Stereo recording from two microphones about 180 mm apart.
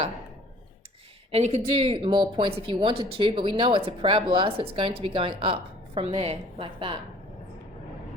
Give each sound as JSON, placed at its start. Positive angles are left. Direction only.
{"t": 1.3, "sound": "speech", "side_deg": -35}